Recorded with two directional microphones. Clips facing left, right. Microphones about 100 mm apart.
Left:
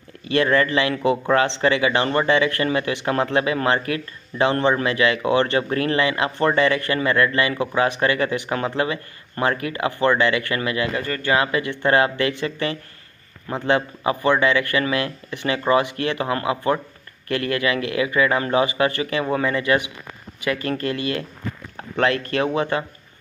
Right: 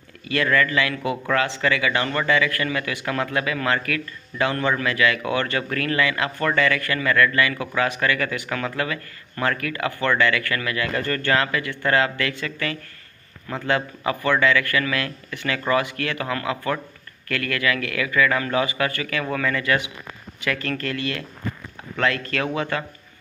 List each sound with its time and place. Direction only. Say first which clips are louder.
0.3 s speech: left 3 dB; 25° left (ahead or behind)
11.0 s speech: right 1 dB; 10° left (ahead or behind)